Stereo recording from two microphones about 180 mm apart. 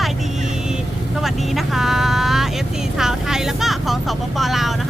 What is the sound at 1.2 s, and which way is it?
Speech, centre (ahead or behind).